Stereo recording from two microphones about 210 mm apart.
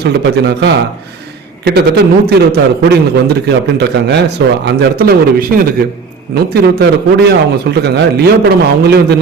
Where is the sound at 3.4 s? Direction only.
55° right (ahead or behind).